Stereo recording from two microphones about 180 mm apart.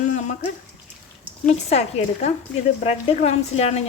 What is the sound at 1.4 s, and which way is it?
Speech, 35° left (ahead or behind).